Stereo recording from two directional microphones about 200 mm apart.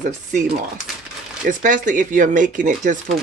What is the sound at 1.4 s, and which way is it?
Speech, 40° right (ahead or behind).